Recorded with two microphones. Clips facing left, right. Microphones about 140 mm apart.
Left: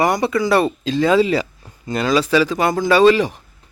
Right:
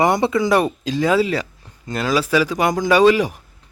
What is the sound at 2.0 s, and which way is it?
Speech, 10° right (ahead or behind).